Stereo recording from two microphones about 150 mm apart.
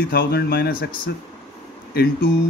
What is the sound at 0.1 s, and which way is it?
Speech, 90° left.